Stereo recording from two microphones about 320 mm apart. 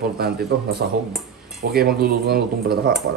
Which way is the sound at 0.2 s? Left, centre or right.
Right.